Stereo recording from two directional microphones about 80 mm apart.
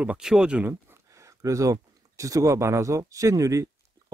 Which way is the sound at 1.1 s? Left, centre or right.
Right.